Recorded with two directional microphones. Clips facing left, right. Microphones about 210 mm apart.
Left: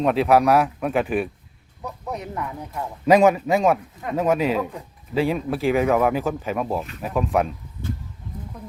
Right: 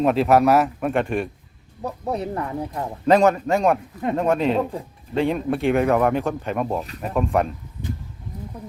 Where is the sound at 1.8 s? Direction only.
35° right (ahead or behind).